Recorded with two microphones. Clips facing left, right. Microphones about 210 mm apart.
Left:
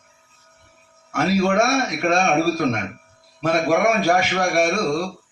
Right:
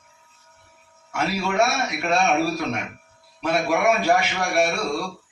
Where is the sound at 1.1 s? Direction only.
45° left (ahead or behind).